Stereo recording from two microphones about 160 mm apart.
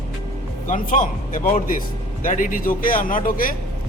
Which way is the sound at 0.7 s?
55° left (ahead or behind).